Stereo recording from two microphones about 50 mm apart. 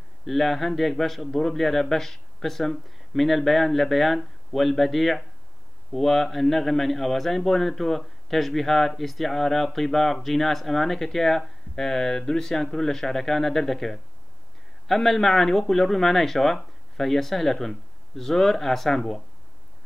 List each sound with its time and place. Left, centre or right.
0.2 s a man's voice: centre